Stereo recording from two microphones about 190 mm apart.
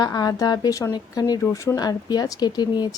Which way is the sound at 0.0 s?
20° left (ahead or behind).